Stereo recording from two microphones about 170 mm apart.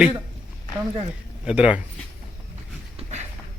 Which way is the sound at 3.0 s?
40° right (ahead or behind).